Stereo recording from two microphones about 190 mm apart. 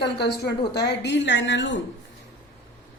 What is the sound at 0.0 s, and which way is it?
A woman's voice, 60° left (ahead or behind).